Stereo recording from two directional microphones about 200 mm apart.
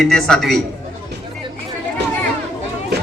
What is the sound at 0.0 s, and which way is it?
Speech, 5° left (ahead or behind).